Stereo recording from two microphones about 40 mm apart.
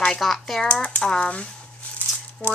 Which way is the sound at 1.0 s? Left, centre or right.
Centre.